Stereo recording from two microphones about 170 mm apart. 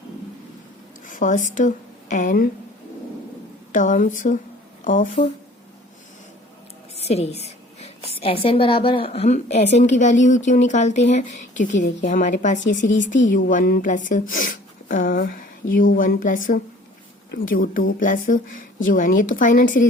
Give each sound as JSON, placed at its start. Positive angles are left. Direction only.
{"t": 1.0, "sound": "speech", "side_deg": 50}
{"t": 3.7, "sound": "a woman's voice", "side_deg": 50}
{"t": 6.9, "sound": "a woman's voice", "side_deg": 40}